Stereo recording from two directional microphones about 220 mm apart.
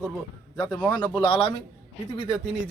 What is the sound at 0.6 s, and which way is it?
A man's voice, 20° left (ahead or behind).